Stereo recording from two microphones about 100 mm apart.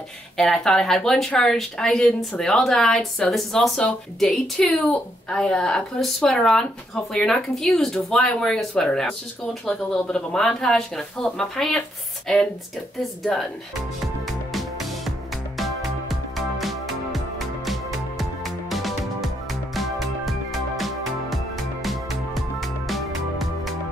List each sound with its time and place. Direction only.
0.4 s speech: 5° left (ahead or behind)
13.3 s speech: centre (ahead or behind)
14.2 s music: centre (ahead or behind)